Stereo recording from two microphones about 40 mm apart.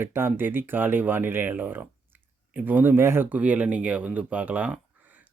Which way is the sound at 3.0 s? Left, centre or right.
Right.